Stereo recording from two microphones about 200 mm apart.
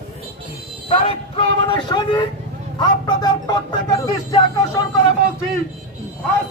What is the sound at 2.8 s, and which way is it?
Speech, 20° left (ahead or behind).